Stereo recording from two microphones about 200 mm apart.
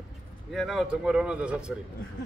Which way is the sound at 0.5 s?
Centre (ahead or behind).